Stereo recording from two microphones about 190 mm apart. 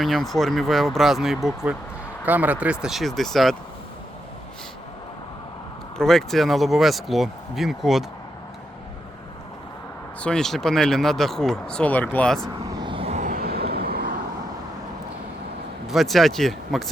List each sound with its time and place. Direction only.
0.0 s speech: centre (ahead or behind)
6.0 s speech: centre (ahead or behind)
10.2 s speech: 5° left (ahead or behind)
12.6 s vehicle: 20° right (ahead or behind); by 14.1 s 55° right (ahead or behind)
15.9 s speech: centre (ahead or behind)